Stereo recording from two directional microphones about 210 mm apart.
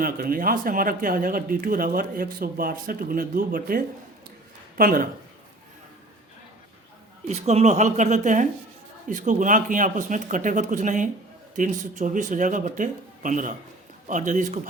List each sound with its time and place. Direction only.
0.0 s speech: 45° right (ahead or behind)
7.3 s speech: 30° right (ahead or behind)